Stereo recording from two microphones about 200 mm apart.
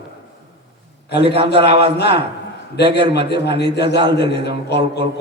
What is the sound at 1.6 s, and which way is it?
Speech, 30° right (ahead or behind).